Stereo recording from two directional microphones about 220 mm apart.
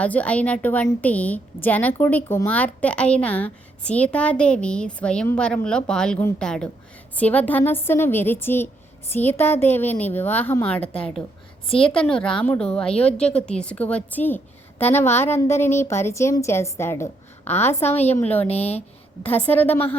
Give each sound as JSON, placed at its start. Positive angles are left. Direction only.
{"t": 0.0, "sound": "a woman's voice", "side_deg": 5}
{"t": 18.4, "sound": "speech", "side_deg": 30}
{"t": 19.2, "sound": "a woman's voice", "side_deg": 10}